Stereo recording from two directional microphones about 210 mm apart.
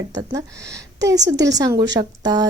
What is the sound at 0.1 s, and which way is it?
Speech, 20° right (ahead or behind).